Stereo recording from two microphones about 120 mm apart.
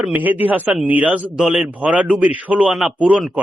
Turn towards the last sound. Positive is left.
turn(degrees=-5)  # may be behind; listen again after turning